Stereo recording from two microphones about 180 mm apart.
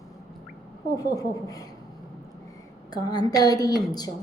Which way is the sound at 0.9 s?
20° left (ahead or behind).